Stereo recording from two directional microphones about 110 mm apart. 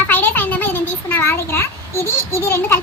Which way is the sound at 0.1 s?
15° left (ahead or behind).